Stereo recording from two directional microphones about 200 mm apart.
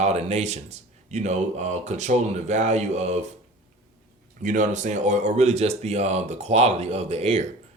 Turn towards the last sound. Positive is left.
turn(degrees=-30)  # may be behind; listen again after turning